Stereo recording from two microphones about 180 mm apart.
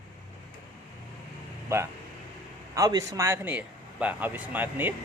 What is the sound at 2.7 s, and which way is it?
Speech, 20° right (ahead or behind).